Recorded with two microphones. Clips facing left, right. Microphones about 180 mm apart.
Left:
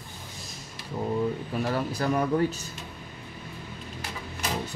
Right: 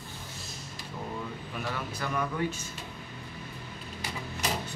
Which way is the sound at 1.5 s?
35° left (ahead or behind).